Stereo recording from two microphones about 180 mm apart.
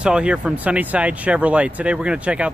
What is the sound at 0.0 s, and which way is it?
Speech, 5° right (ahead or behind).